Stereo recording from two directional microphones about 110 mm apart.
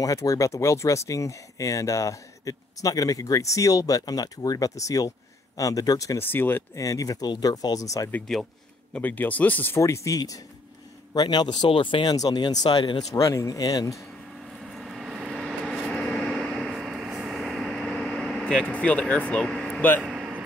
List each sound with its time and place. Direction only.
0.0 s speech: 30° left (ahead or behind)
6.2 s speech: 20° left (ahead or behind)
6.7 s speech: 30° left (ahead or behind)
8.3 s a man's voice: 5° left (ahead or behind)
8.9 s speech: 15° left (ahead or behind)
9.8 s speech: 25° left (ahead or behind); by 13.0 s 45° left (ahead or behind)
13.1 s speech: 30° left (ahead or behind)
14.4 s vehicle: 5° right (ahead or behind)
20.0 s vehicle: 5° right (ahead or behind)